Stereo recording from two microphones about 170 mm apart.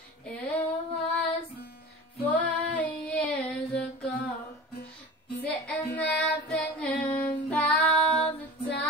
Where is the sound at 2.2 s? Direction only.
10° left (ahead or behind).